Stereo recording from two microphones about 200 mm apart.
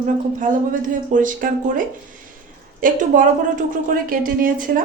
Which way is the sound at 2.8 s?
40° right (ahead or behind).